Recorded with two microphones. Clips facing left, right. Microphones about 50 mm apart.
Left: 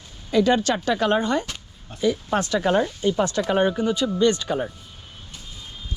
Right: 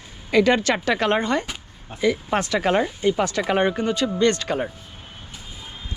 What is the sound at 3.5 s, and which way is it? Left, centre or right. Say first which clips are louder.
A man's voice: even; right.